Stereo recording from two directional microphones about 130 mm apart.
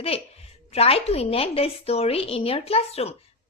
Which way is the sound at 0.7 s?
50° left (ahead or behind).